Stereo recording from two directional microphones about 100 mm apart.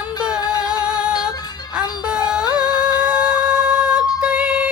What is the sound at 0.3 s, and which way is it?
Music, 40° left (ahead or behind).